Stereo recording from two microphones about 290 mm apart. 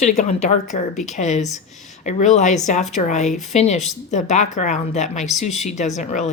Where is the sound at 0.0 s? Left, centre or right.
Left.